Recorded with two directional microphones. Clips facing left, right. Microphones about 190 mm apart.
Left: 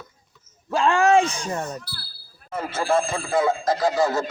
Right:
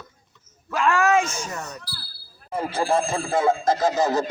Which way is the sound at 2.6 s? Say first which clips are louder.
Even; 35° right (ahead or behind).